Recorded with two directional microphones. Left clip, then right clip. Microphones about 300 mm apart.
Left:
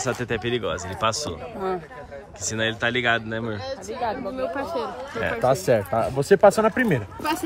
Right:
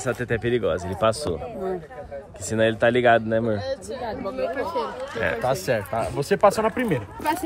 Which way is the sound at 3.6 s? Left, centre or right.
Left.